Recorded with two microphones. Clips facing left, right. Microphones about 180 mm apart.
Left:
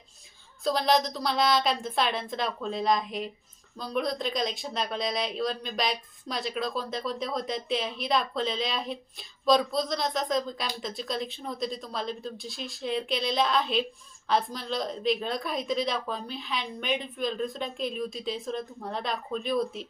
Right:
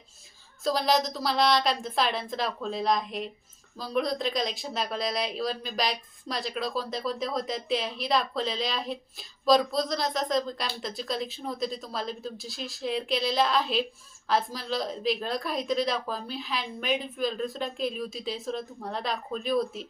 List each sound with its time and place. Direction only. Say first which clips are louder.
0.6 s speech: even; centre (ahead or behind)